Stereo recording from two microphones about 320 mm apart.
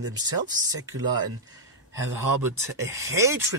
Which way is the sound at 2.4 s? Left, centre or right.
Centre.